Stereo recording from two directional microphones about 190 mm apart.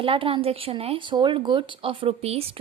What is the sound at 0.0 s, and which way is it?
A woman's voice, 30° right (ahead or behind).